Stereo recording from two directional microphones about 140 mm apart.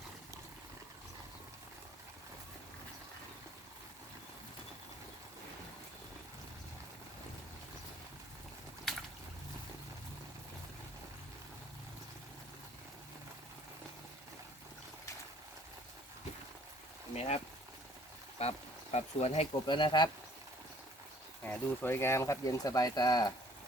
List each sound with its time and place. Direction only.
8.8 s a sound: centre (ahead or behind)
17.2 s speech: 45° left (ahead or behind)
19.6 s speech: 35° left (ahead or behind)
21.4 s speech: 15° left (ahead or behind)